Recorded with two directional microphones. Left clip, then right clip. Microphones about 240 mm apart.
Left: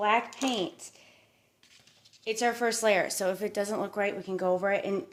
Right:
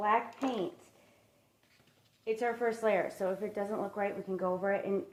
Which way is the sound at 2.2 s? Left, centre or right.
Left.